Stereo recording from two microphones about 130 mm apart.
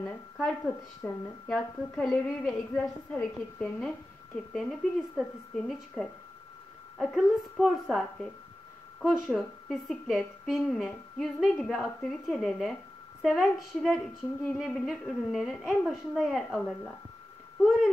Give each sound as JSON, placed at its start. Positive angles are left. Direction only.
{"t": 0.0, "sound": "a woman's voice", "side_deg": 5}